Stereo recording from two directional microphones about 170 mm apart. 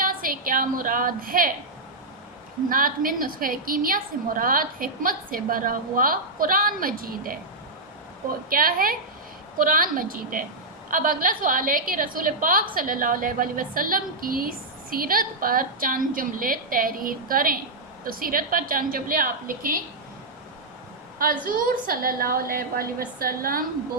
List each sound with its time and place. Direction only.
0.0 s a woman's voice: 55° right (ahead or behind)
2.6 s a woman's voice: 55° right (ahead or behind)
8.4 s a woman's voice: 60° right (ahead or behind)
21.2 s a woman's voice: 55° right (ahead or behind)